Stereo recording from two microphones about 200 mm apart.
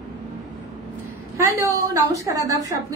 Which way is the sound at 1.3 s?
15° right (ahead or behind).